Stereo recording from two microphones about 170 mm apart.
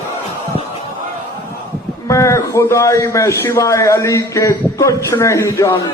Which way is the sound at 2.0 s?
20° left (ahead or behind).